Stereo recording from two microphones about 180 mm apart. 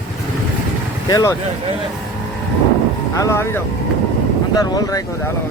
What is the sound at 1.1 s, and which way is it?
Speech, 20° left (ahead or behind).